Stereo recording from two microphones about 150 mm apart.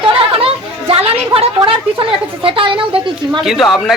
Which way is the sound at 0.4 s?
40° right (ahead or behind).